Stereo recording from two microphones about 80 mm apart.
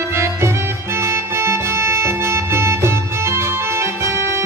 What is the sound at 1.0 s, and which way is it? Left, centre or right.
Music, right.